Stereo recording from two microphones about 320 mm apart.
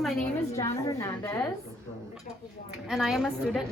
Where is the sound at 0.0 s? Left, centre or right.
Centre.